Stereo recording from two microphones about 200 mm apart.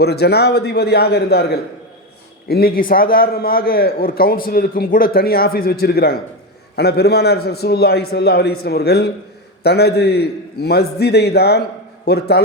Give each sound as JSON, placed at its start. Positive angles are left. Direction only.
{"t": 0.0, "sound": "a man's voice", "side_deg": 55}